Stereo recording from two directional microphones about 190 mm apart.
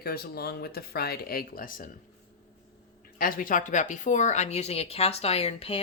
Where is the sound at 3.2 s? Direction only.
45° left (ahead or behind).